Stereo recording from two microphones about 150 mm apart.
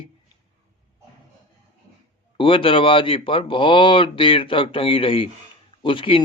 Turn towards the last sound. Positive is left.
turn(degrees=35)  # may be behind; listen again after turning